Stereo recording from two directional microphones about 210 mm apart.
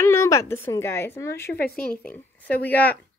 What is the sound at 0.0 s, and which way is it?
A woman's voice, 15° left (ahead or behind).